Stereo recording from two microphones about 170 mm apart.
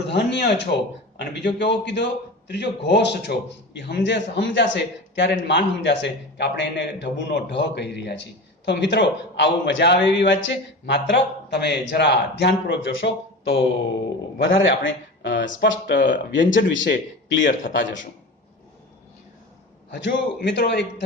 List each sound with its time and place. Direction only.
0.1 s a man's voice: 80° left
14.3 s a man's voice: 90° left
19.9 s speech: 90° left